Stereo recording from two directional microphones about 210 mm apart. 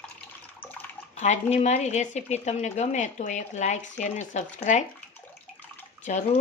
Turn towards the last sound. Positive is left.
turn(degrees=35)  # may be behind; listen again after turning